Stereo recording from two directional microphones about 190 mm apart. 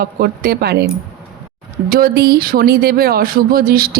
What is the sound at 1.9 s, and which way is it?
A woman's voice, 50° right (ahead or behind).